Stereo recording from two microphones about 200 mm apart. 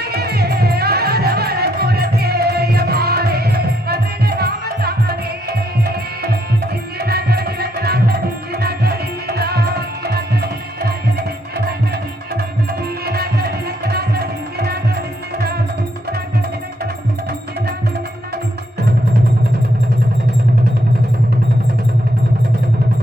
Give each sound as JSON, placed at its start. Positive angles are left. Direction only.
{"t": 0.0, "sound": "music", "side_deg": -50}
{"t": 13.1, "sound": "music", "side_deg": -50}